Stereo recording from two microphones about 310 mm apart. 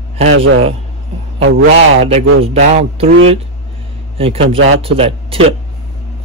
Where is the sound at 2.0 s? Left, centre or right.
Centre.